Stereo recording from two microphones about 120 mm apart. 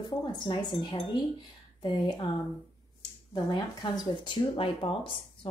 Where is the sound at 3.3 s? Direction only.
35° left (ahead or behind).